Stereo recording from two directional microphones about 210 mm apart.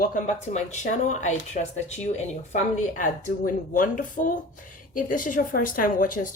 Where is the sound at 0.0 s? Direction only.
35° left (ahead or behind).